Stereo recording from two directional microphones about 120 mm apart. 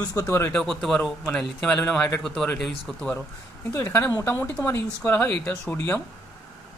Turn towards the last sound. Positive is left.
turn(degrees=10)  # may be behind; listen again after turning